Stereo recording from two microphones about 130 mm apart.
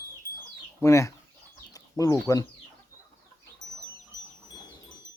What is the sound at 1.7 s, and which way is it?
Bird, 25° left (ahead or behind).